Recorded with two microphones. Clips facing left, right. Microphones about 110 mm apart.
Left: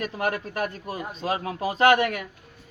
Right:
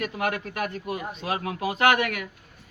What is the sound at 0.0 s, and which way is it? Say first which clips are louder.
A man's voice: left 1 dB; 35° left (ahead or behind).